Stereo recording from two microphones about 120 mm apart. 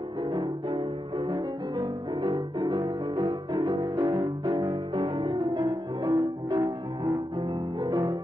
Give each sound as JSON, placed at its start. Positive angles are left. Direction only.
{"t": 0.7, "sound": "music", "side_deg": -40}